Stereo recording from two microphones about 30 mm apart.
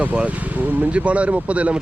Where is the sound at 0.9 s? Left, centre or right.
Right.